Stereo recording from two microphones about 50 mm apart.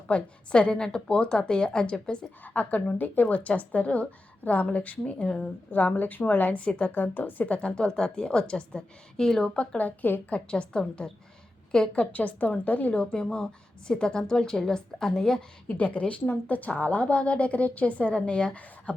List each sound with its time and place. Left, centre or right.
0.1 s a woman's voice: left
2.6 s a woman's voice: left
5.7 s a woman's voice: left
7.9 s a woman's voice: centre
9.6 s a woman's voice: left
10.3 s a woman's voice: left
11.7 s a woman's voice: centre
12.1 s a woman's voice: left
12.9 s a woman's voice: centre
15.6 s a woman's voice: left